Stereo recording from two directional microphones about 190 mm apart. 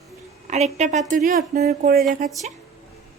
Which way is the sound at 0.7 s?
35° right (ahead or behind).